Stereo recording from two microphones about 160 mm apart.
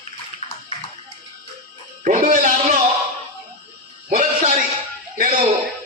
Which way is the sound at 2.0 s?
55° right (ahead or behind).